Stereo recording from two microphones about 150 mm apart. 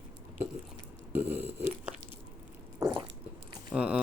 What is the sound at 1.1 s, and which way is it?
Burping, 15° right (ahead or behind).